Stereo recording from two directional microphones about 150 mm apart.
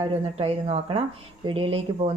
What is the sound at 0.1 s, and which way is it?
Speech, 40° right (ahead or behind).